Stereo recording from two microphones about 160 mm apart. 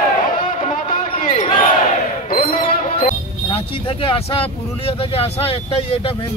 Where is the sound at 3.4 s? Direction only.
35° left (ahead or behind).